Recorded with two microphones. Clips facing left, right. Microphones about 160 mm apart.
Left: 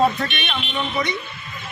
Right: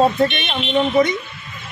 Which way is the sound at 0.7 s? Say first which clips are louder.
Right 10 dB; 45° right (ahead or behind).